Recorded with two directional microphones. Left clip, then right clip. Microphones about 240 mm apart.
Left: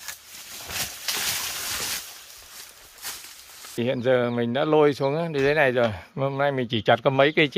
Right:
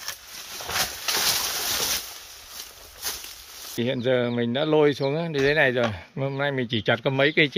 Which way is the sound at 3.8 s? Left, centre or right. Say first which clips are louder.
Left 2 dB; centre.